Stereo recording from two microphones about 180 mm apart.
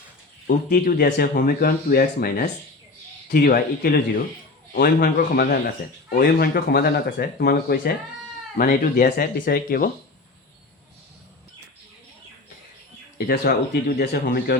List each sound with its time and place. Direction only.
0.4 s speech: 50° left (ahead or behind)
13.1 s speech: 55° left (ahead or behind)